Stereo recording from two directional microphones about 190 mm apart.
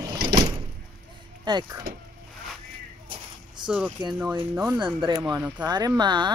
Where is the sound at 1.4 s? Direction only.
20° right (ahead or behind).